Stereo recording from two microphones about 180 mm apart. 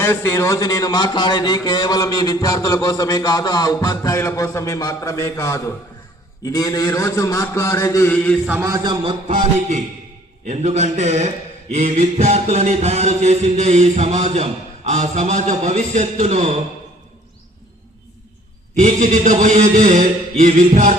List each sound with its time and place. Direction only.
0.0 s a man's voice: 15° left (ahead or behind)
8.4 s a man's voice: 15° right (ahead or behind)
9.3 s music: 40° right (ahead or behind)
18.8 s a sound: 40° right (ahead or behind)